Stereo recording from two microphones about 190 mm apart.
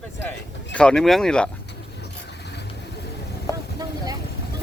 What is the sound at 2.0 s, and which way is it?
Vehicle, 60° left (ahead or behind).